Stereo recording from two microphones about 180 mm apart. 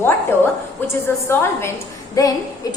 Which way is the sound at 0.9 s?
15° left (ahead or behind).